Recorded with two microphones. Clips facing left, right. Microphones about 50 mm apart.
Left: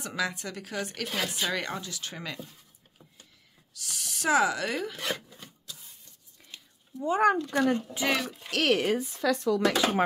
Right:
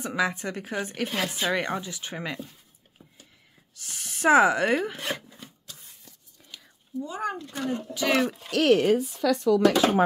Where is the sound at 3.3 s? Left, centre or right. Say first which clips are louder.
Right 1 dB; right.